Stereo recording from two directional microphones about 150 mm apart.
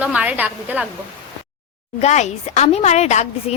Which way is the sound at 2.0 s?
50° left (ahead or behind).